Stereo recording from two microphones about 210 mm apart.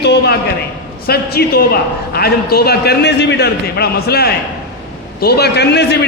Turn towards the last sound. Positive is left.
turn(degrees=50)  # may be behind; listen again after turning